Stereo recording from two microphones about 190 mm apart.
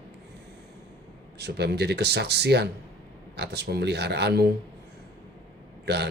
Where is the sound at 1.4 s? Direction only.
60° right (ahead or behind).